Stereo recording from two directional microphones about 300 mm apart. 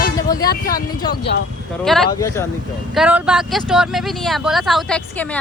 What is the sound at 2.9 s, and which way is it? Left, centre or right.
Speech, centre.